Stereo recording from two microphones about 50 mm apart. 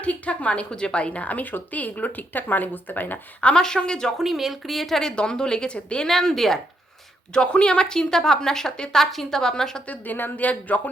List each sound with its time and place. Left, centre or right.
0.0 s a woman's voice: left
3.4 s a woman's voice: centre
4.2 s a woman's voice: centre
6.1 s speech: centre
7.3 s a woman's voice: centre
9.8 s a woman's voice: left